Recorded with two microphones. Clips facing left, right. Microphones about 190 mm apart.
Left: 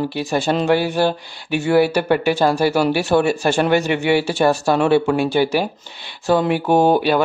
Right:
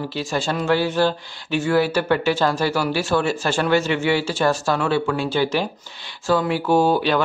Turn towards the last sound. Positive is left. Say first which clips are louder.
# left 3 dB
turn(degrees=15)  # may be behind; listen again after turning